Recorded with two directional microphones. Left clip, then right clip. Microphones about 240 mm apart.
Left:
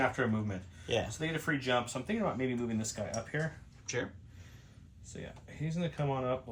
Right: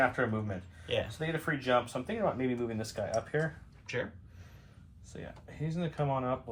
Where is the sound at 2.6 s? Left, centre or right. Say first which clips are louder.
Right 2 dB; centre.